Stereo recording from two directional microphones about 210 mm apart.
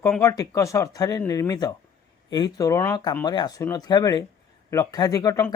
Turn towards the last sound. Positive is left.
turn(degrees=15)  # may be behind; listen again after turning